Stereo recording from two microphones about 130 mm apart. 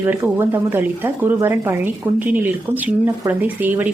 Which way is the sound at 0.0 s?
15° right (ahead or behind).